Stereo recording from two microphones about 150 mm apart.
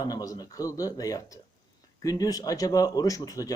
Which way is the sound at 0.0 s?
25° left (ahead or behind).